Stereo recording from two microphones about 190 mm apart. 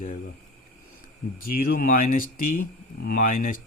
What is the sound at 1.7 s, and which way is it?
Speech, 45° left (ahead or behind).